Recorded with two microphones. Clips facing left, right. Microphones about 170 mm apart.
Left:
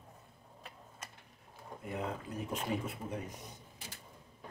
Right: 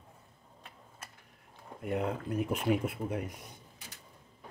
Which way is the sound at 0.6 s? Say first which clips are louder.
Left 1 dB; centre (ahead or behind).